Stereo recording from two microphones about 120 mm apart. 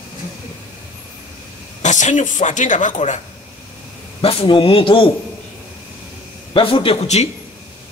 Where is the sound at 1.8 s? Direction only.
90° left.